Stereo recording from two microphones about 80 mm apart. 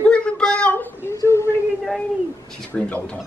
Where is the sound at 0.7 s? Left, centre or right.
Left.